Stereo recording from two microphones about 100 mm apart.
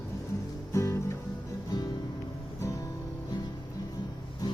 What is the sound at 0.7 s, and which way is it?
Music, 30° left (ahead or behind).